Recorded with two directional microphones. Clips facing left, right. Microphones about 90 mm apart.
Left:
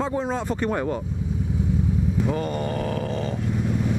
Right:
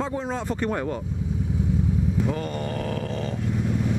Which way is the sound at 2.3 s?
15° left (ahead or behind).